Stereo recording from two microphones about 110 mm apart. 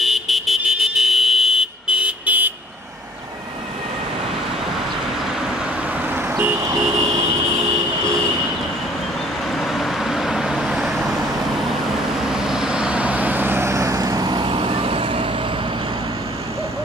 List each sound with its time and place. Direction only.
0.0 s vehicle: centre (ahead or behind)
5.9 s vehicle: 20° right (ahead or behind)
9.5 s vehicle: centre (ahead or behind)
12.4 s vehicle: 5° right (ahead or behind); by 15.3 s 55° right (ahead or behind)